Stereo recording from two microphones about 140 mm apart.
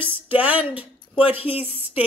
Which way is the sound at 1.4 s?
45° left (ahead or behind).